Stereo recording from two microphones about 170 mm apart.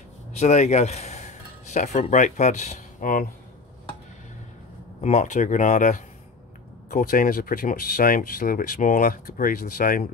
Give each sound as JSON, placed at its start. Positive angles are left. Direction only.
{"t": 0.3, "sound": "speech", "side_deg": 40}
{"t": 5.0, "sound": "speech", "side_deg": 45}